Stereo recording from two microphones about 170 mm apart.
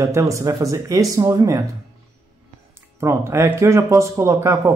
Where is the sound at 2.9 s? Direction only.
15° right (ahead or behind).